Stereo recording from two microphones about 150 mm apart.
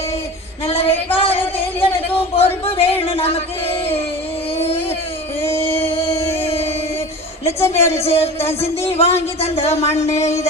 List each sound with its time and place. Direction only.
0.7 s a sound: 40° left (ahead or behind)
5.4 s music: 15° left (ahead or behind)
7.4 s a woman's voice: 20° left (ahead or behind)
8.0 s speech: 40° left (ahead or behind)
9.7 s speech: 20° left (ahead or behind)